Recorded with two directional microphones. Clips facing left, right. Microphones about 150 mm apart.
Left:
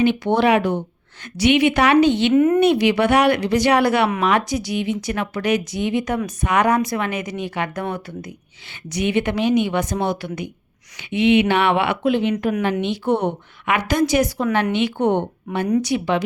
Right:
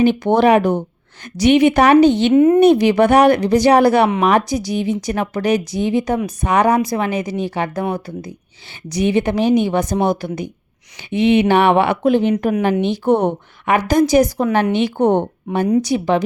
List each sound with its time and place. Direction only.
0.0 s a woman's voice: 45° right (ahead or behind)
2.3 s speech: 25° right (ahead or behind)
2.6 s a woman's voice: 40° right (ahead or behind)